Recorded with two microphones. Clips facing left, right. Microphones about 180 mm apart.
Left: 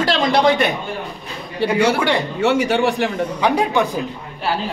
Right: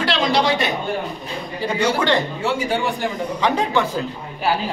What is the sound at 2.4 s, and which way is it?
Speech, 75° left (ahead or behind).